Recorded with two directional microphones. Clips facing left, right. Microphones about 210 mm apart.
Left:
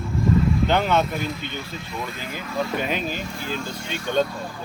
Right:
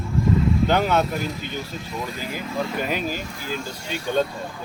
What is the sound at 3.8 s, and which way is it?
Speech, 35° right (ahead or behind).